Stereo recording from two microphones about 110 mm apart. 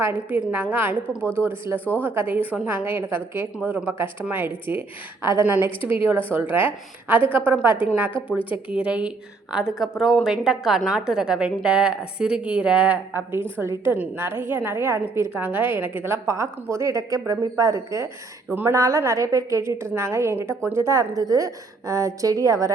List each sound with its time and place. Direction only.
0.0 s a woman's voice: 15° right (ahead or behind)
8.7 s a woman's voice: 10° right (ahead or behind); by 22.7 s 30° right (ahead or behind)